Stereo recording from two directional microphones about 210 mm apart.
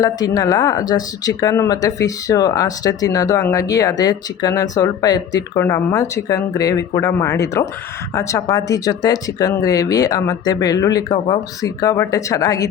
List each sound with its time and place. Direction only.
0.0 s speech: 15° left (ahead or behind)